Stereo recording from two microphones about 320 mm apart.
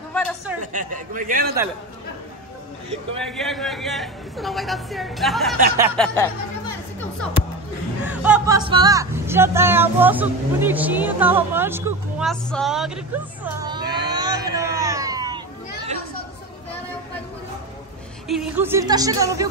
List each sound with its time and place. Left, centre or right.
0.1 s a sound: centre
0.6 s speech: right
3.2 s speech: centre
5.8 s music: centre
8.0 s speech: centre
18.3 s music: centre